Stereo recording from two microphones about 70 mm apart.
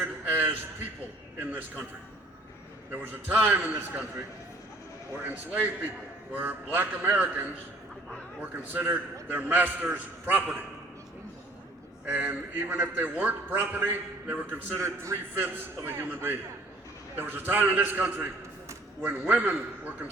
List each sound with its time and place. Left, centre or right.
0.3 s a man's voice: right
2.9 s a man's voice: right
5.1 s a man's voice: right
12.0 s a man's voice: right
14.8 s a man's voice: right